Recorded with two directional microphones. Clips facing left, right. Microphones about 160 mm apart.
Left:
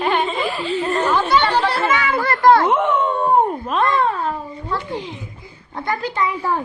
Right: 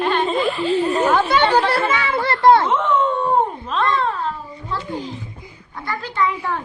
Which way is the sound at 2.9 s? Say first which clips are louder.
Left 1 dB; 55° left (ahead or behind).